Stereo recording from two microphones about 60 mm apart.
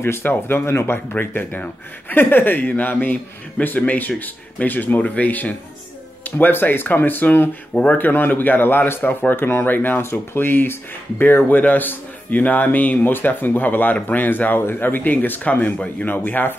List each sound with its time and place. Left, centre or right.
0.0 s speech: left
7.7 s speech: left
8.0 s speech: left
9.7 s speech: left